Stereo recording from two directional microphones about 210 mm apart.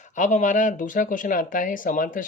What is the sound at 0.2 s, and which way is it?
Speech, 35° left (ahead or behind).